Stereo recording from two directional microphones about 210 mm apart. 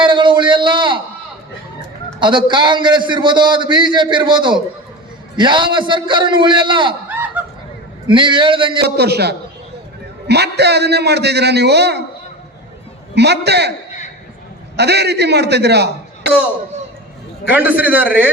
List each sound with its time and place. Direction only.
0.0 s a sound: 25° right (ahead or behind)
2.1 s a man's voice: 20° right (ahead or behind)
7.1 s fowl: 10° right (ahead or behind)
8.0 s a man's voice: 25° right (ahead or behind)
9.0 s a man's voice: 50° right (ahead or behind)
13.1 s a man's voice: 55° right (ahead or behind)
14.8 s a man's voice: 50° right (ahead or behind)
17.5 s a man's voice: 5° right (ahead or behind)